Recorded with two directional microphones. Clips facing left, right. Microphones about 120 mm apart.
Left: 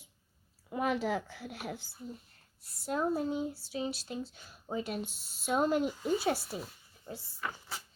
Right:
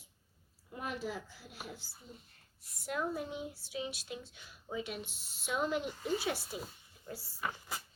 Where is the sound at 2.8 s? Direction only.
30° left (ahead or behind).